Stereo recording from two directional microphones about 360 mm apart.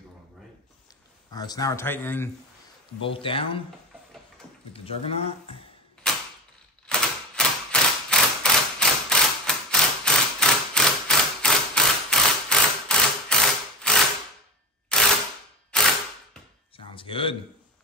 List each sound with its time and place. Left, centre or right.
1.3 s speech: centre
4.7 s speech: centre
6.0 s a sound: centre
6.9 s typewriter: centre
15.7 s mechanisms: centre
16.7 s a sound: centre